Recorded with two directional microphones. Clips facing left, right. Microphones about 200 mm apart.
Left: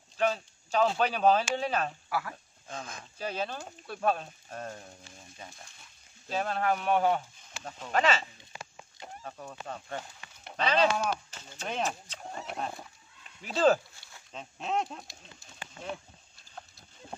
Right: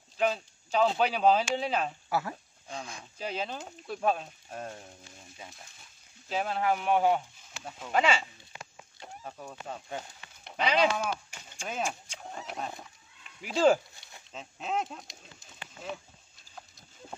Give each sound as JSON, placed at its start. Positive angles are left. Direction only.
{"t": 0.2, "sound": "speech", "side_deg": -15}
{"t": 2.0, "sound": "speech", "side_deg": -25}
{"t": 2.8, "sound": "speech", "side_deg": -15}
{"t": 6.3, "sound": "speech", "side_deg": -10}
{"t": 12.2, "sound": "horse", "side_deg": 0}
{"t": 13.4, "sound": "a sound", "side_deg": -10}
{"t": 14.6, "sound": "speech", "side_deg": 0}